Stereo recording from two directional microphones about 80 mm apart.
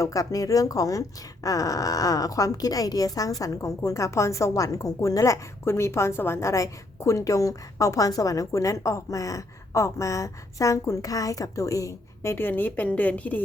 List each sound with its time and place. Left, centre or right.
0.0 s speech: left; by 13.4 s centre